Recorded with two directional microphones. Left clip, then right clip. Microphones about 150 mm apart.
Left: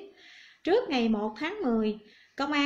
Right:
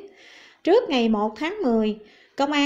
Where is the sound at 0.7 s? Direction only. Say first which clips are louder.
Right 7 dB; 30° right (ahead or behind).